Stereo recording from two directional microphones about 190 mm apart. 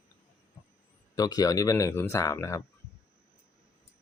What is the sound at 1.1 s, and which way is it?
Speech, 20° left (ahead or behind).